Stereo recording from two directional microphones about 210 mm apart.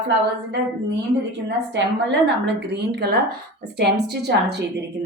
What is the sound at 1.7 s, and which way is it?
A woman's voice, 55° right (ahead or behind).